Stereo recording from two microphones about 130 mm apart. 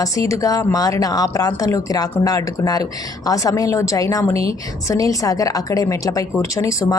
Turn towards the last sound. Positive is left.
turn(degrees=25)  # may be behind; listen again after turning